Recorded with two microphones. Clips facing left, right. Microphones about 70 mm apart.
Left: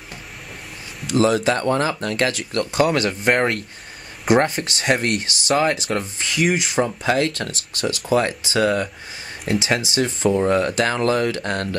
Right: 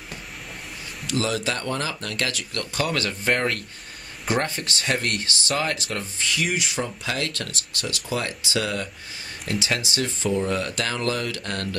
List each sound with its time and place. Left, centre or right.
1.1 s speech: left